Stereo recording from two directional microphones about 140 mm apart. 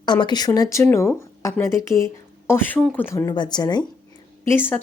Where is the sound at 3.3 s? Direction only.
30° left (ahead or behind).